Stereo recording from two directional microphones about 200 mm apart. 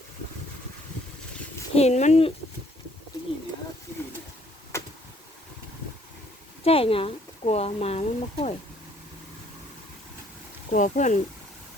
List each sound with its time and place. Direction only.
1.7 s speech: 35° left (ahead or behind)
4.7 s a sound: 15° left (ahead or behind)
6.7 s speech: 30° left (ahead or behind)
10.7 s speech: 40° left (ahead or behind)